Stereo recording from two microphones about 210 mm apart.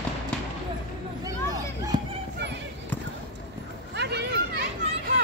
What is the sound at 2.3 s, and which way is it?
Basketball bounce, 55° right (ahead or behind).